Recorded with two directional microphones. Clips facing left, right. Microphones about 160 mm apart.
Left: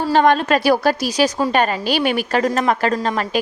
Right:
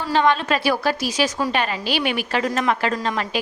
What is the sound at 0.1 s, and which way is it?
A woman's voice, 45° left (ahead or behind).